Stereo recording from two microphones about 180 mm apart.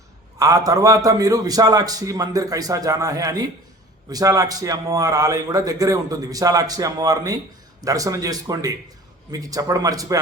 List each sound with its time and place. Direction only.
0.3 s a man's voice: 20° right (ahead or behind)